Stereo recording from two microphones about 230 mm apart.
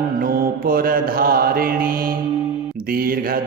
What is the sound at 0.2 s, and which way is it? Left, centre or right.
Mantra, right.